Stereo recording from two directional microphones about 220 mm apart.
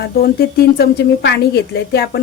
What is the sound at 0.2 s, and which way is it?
A woman's voice, 45° left (ahead or behind).